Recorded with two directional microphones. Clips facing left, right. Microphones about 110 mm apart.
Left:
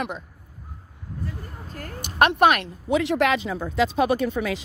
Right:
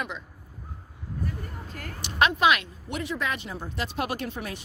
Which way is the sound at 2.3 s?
55° left (ahead or behind).